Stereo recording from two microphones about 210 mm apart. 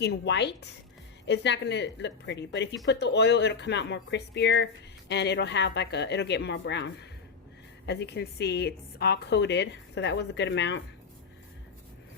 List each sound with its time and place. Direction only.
0.0 s speech: 55° left (ahead or behind)